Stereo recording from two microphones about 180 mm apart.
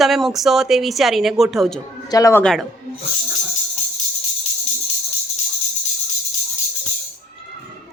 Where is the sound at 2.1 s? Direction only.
20° left (ahead or behind).